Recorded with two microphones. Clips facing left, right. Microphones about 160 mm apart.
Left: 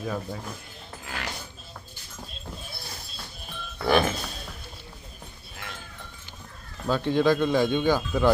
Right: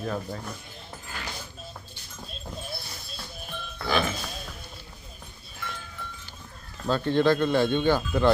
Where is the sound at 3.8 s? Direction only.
55° left (ahead or behind).